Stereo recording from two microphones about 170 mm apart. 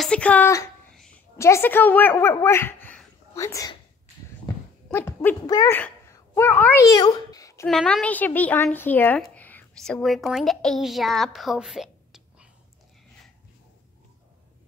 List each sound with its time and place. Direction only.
0.0 s a woman's voice: 5° left (ahead or behind)
4.9 s a woman's voice: 15° left (ahead or behind)
7.6 s a woman's voice: 5° left (ahead or behind)